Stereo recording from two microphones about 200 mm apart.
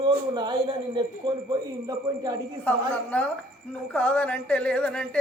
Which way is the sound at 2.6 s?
5° left (ahead or behind).